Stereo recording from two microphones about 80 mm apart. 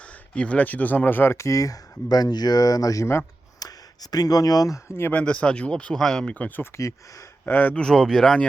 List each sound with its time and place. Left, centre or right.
0.0 s speech: centre
1.5 s speech: left
5.1 s speech: centre
6.7 s speech: left
7.4 s speech: left
7.8 s speech: centre